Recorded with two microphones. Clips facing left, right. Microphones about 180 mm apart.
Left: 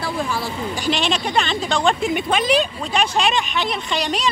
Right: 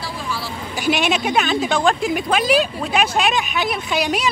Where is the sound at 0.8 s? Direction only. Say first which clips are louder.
Right 4 dB; 10° right (ahead or behind).